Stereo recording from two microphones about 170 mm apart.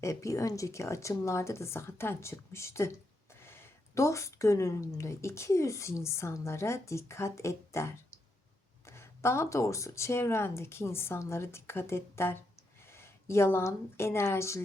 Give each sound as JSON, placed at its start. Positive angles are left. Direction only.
{"t": 0.0, "sound": "a woman's voice", "side_deg": 20}